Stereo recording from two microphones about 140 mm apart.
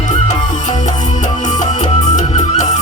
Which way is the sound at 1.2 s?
60° left (ahead or behind).